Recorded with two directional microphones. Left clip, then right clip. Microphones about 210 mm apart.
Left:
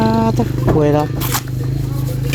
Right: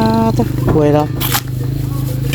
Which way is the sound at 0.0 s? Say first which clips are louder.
Right 2 dB; 5° right (ahead or behind).